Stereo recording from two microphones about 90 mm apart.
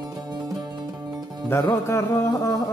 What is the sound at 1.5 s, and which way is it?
Music, 30° left (ahead or behind).